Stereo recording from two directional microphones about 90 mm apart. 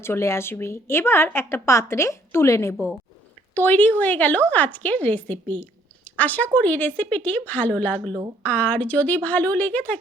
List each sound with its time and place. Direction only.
0.0 s a woman's voice: 30° left (ahead or behind)
3.5 s a woman's voice: 20° left (ahead or behind)